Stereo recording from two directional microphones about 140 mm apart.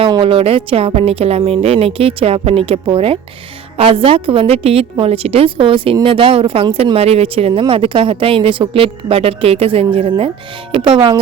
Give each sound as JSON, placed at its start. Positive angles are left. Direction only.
{"t": 0.0, "sound": "a woman's voice", "side_deg": -40}